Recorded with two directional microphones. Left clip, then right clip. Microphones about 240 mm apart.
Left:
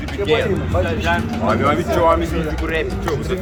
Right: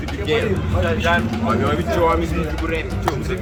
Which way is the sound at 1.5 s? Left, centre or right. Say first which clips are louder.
Left 5 dB; centre.